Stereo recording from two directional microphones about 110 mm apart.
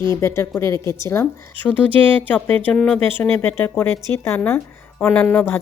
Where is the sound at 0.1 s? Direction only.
25° left (ahead or behind).